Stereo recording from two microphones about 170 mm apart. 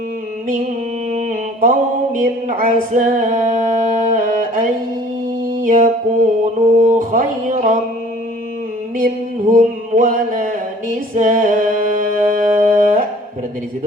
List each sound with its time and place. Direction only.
1.1 s mantra: 50° right (ahead or behind)
2.2 s music: 50° right (ahead or behind)
4.1 s a sound: 50° right (ahead or behind)
5.6 s music: 50° right (ahead or behind)
9.0 s music: 55° right (ahead or behind)